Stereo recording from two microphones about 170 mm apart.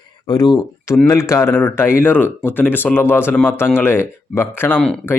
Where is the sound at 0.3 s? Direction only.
25° left (ahead or behind).